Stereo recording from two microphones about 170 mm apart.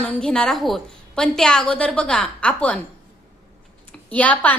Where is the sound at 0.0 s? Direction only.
5° left (ahead or behind).